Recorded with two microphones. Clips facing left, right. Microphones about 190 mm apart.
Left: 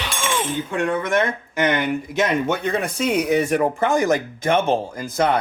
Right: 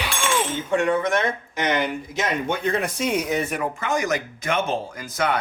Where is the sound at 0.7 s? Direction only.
55° left (ahead or behind).